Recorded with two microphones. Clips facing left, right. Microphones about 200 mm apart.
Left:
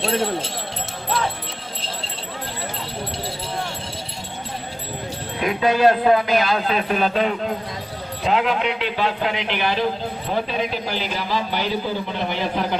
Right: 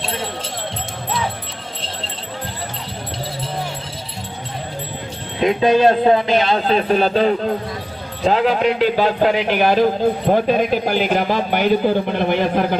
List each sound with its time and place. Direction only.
5.4 s speech: 25° right (ahead or behind); by 12.6 s 55° right (ahead or behind)